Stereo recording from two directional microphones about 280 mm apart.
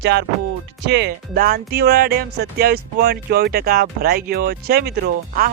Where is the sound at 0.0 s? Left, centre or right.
Right.